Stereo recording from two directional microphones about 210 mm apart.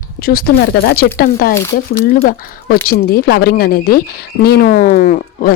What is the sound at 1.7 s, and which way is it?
Speech, 40° left (ahead or behind).